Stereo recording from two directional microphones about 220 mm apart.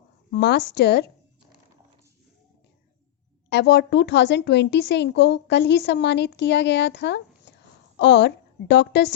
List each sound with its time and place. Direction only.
0.3 s a woman's voice: 45° left (ahead or behind)
3.5 s a woman's voice: 50° left (ahead or behind)